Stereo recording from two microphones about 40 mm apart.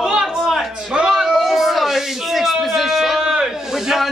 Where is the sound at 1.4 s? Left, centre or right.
Centre.